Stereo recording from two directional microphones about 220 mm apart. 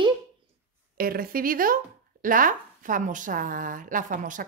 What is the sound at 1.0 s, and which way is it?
Speech, 40° right (ahead or behind).